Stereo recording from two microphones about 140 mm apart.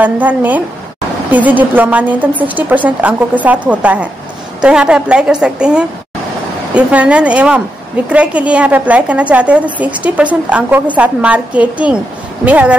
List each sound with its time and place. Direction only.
0.0 s a woman's voice: 10° right (ahead or behind)